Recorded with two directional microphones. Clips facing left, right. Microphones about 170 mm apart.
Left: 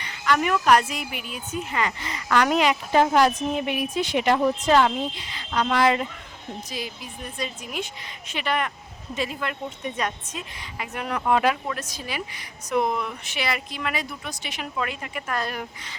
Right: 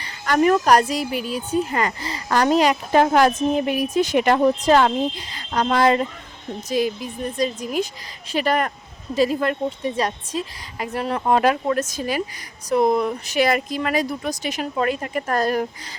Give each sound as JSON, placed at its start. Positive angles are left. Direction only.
{"t": 0.0, "sound": "a woman's voice", "side_deg": -35}